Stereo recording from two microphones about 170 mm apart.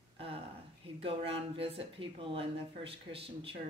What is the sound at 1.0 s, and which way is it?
Speech, 35° right (ahead or behind).